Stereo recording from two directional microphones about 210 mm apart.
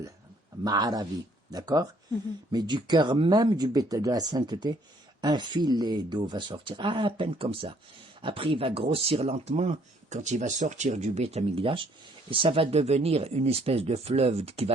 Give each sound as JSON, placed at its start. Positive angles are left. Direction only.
{"t": 0.6, "sound": "speech", "side_deg": -15}